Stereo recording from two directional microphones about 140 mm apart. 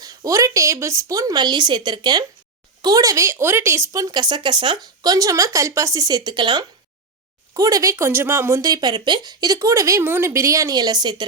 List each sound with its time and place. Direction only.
0.0 s speech: 25° right (ahead or behind)